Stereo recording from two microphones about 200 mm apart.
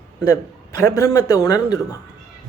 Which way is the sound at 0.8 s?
15° left (ahead or behind).